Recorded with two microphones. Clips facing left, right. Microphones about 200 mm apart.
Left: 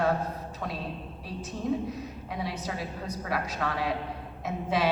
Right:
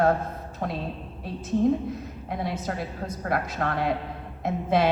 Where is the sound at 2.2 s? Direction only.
50° right (ahead or behind).